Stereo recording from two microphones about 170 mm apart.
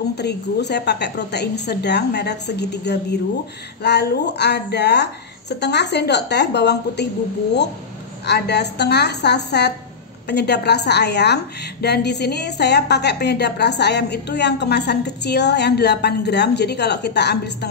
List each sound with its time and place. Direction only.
0.2 s speech: 75° left (ahead or behind)
8.3 s a woman's voice: 80° left